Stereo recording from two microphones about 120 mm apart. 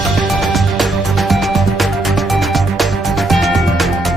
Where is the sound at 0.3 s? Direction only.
Centre (ahead or behind).